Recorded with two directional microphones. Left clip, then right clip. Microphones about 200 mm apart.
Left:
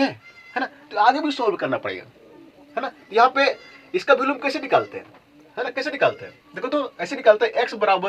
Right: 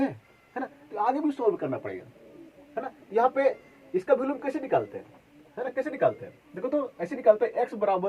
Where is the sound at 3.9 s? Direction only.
30° left (ahead or behind).